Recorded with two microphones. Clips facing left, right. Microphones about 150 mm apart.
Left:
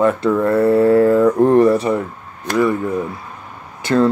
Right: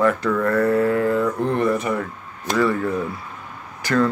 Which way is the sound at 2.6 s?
15° left (ahead or behind).